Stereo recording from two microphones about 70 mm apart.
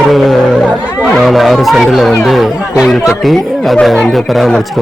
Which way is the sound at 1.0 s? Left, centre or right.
Centre.